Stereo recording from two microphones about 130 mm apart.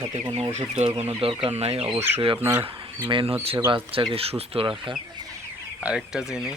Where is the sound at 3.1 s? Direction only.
40° right (ahead or behind).